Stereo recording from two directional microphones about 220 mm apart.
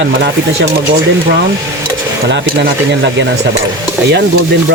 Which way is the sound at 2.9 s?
55° right (ahead or behind).